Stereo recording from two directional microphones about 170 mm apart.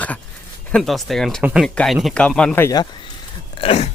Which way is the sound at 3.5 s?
35° left (ahead or behind).